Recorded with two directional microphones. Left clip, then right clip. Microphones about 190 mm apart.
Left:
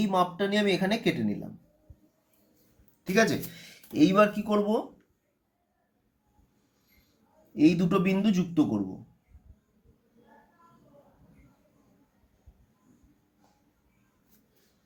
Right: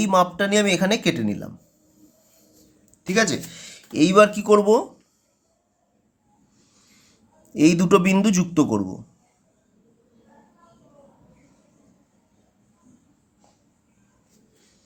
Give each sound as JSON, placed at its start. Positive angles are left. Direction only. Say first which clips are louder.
{"t": 0.0, "sound": "speech", "louder": "right 8 dB", "side_deg": -45}
{"t": 3.0, "sound": "speech", "louder": "right 4 dB", "side_deg": -20}
{"t": 7.5, "sound": "a man's voice", "louder": "right 7 dB", "side_deg": -35}